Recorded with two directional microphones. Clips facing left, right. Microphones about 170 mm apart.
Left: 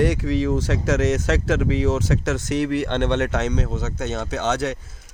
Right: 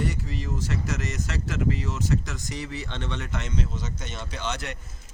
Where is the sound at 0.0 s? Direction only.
75° left (ahead or behind).